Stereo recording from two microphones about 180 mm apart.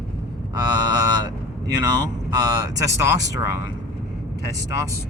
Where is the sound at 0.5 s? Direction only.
20° right (ahead or behind).